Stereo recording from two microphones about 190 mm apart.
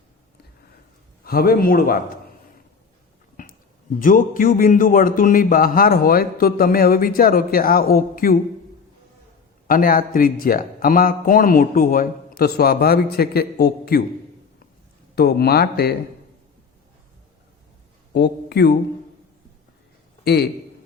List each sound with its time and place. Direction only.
1.2 s a man's voice: 50° left (ahead or behind)
4.0 s a man's voice: 45° left (ahead or behind)
9.6 s a man's voice: 50° left (ahead or behind)
15.1 s speech: 55° left (ahead or behind)
18.1 s a man's voice: 60° left (ahead or behind)
20.2 s speech: 60° left (ahead or behind)